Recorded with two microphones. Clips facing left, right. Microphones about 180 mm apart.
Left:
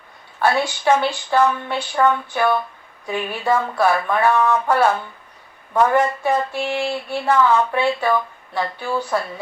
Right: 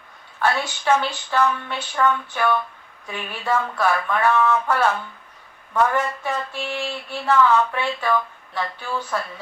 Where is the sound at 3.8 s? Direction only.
40° left (ahead or behind).